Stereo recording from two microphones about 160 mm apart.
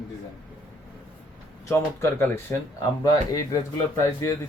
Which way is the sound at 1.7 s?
15° left (ahead or behind).